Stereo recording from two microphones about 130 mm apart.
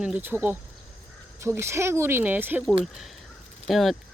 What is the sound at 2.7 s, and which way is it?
Speech, centre (ahead or behind).